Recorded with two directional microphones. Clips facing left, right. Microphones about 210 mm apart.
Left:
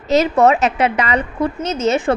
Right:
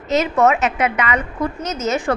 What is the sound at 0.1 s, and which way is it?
A woman's voice, 35° left (ahead or behind).